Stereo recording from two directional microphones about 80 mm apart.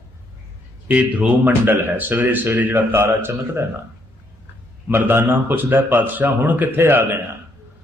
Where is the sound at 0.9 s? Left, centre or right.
Centre.